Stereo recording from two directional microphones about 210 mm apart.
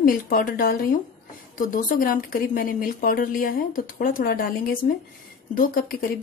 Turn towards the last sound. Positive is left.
turn(degrees=45)  # may be behind; listen again after turning